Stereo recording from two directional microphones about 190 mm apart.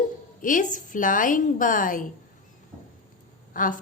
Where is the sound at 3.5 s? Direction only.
45° left (ahead or behind).